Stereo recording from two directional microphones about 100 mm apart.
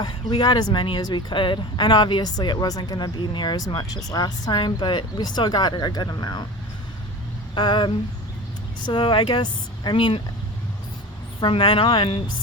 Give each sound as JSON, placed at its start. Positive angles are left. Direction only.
{"t": 0.0, "sound": "speech", "side_deg": 50}
{"t": 7.5, "sound": "speech", "side_deg": 50}
{"t": 11.3, "sound": "speech", "side_deg": 65}